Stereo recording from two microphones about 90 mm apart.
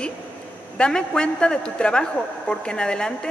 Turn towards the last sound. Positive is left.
turn(degrees=10)  # may be behind; listen again after turning